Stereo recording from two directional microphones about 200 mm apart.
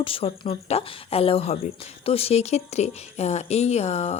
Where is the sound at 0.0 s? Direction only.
30° left (ahead or behind).